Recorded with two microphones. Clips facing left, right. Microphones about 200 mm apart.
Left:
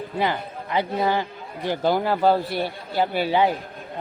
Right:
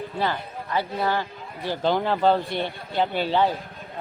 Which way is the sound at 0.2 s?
15° left (ahead or behind).